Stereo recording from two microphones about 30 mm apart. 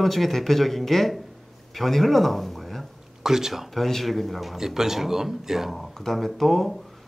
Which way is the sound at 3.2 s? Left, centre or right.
Centre.